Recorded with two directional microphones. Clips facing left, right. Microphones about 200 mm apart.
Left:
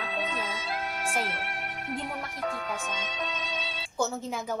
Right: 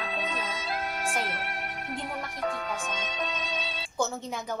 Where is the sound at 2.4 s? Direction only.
40° right (ahead or behind).